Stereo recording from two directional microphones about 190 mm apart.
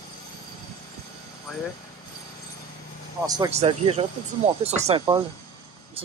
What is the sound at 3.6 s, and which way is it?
Speech, 35° right (ahead or behind).